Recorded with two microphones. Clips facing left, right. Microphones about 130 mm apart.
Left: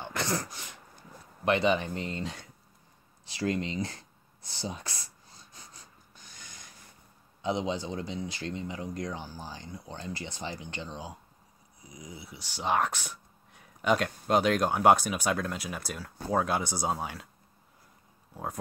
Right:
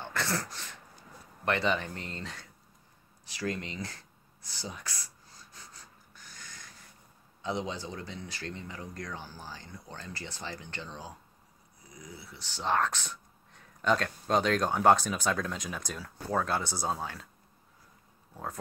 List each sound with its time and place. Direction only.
0.0 s speech: 15° left (ahead or behind)
3.3 s a sound: 25° left (ahead or behind)
6.1 s snort: 20° left (ahead or behind)
7.4 s speech: 20° left (ahead or behind)
18.3 s speech: 15° left (ahead or behind)